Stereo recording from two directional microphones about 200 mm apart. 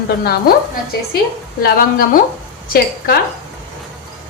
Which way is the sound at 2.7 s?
50° left (ahead or behind).